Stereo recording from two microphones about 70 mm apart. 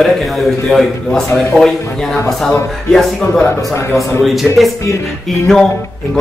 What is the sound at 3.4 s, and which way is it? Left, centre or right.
Speech, left.